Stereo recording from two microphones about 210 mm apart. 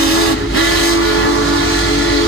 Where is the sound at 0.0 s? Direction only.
85° left.